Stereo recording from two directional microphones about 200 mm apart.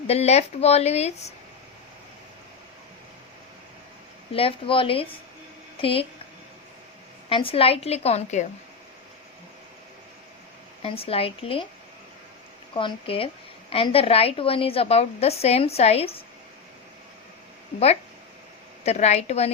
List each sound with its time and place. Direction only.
0.1 s a woman's voice: 30° left (ahead or behind)
4.3 s a woman's voice: 25° left (ahead or behind)
7.3 s a woman's voice: 25° left (ahead or behind)
10.8 s a woman's voice: 30° left (ahead or behind)
12.7 s a woman's voice: 25° left (ahead or behind)
18.9 s a woman's voice: 35° left (ahead or behind)